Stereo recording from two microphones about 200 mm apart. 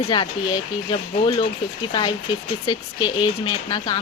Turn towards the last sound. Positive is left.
turn(degrees=20)  # may be behind; listen again after turning